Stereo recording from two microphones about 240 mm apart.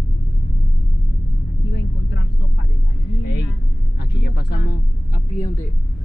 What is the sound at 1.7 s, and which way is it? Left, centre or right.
Vehicle, left.